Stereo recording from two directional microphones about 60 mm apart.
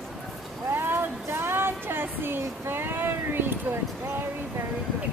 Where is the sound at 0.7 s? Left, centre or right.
Right.